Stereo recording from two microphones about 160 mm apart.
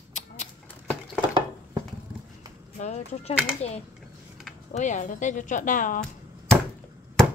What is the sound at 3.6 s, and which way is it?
A woman's voice, 40° left (ahead or behind).